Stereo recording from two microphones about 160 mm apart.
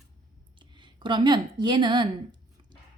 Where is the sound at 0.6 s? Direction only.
30° right (ahead or behind).